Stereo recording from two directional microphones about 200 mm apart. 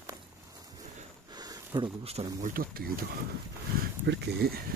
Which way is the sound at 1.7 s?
20° right (ahead or behind).